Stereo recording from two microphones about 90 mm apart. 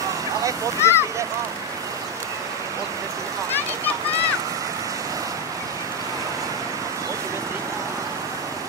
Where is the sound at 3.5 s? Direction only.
20° left (ahead or behind).